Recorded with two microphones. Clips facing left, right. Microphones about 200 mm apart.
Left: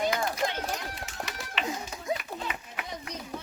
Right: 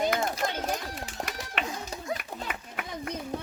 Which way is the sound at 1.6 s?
55° right (ahead or behind).